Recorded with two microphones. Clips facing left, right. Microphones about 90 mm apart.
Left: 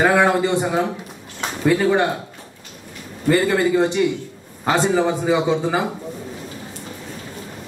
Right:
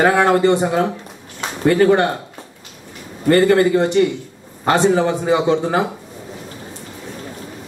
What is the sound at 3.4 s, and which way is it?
A man's voice, 5° left (ahead or behind).